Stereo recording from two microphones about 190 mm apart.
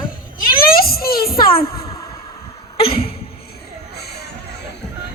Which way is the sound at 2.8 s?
30° left (ahead or behind).